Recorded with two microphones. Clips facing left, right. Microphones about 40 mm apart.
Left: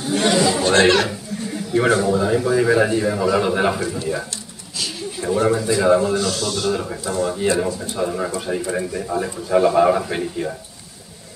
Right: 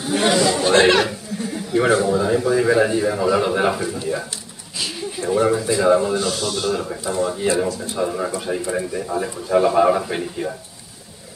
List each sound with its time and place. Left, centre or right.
0.1 s speech: centre
0.4 s chatter: centre
0.7 s speech: centre
5.3 s speech: centre
6.7 s speech: centre
7.1 s speech: centre